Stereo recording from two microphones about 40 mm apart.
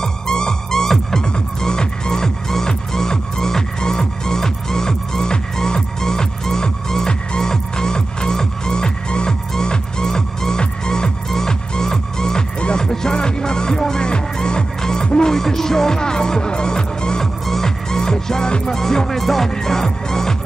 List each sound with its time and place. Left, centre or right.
0.0 s music: centre
12.5 s music: left
12.8 s music: centre